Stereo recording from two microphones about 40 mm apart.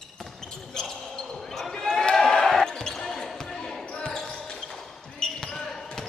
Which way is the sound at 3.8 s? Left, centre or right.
Left.